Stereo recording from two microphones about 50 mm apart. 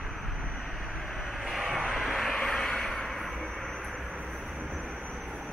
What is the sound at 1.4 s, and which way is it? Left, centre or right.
Vehicle, centre.